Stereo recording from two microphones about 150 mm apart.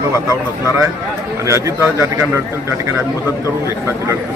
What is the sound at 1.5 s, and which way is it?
Speech, 20° right (ahead or behind).